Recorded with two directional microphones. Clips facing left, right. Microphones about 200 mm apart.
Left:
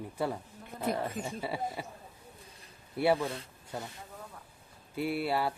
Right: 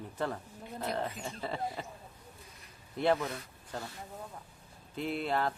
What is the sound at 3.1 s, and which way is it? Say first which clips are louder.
Speech: left 2 dB; 30° left (ahead or behind).